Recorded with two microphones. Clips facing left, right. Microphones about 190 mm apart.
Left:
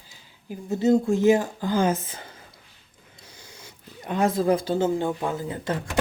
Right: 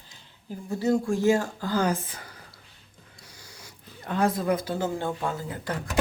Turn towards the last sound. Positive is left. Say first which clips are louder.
# left 4 dB
turn(degrees=20)  # may be behind; listen again after turning